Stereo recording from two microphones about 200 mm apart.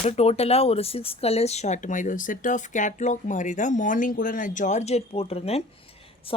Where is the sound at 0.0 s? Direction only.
30° left (ahead or behind).